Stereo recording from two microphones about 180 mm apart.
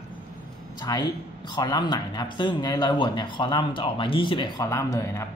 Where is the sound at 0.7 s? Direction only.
25° left (ahead or behind).